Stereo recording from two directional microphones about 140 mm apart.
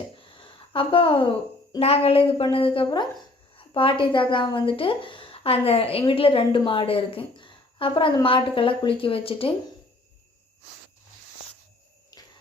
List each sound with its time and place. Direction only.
0.7 s a woman's voice: 40° left (ahead or behind)